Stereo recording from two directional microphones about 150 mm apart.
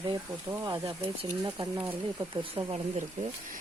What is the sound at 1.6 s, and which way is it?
Speech, 35° right (ahead or behind).